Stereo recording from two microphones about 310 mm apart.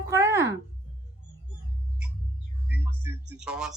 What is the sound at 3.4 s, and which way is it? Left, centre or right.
Speech, centre.